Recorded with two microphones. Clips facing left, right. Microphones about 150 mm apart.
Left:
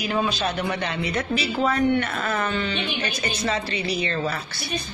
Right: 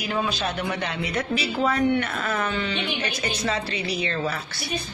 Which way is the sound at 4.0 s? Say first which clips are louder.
Left 1 dB; 5° right (ahead or behind).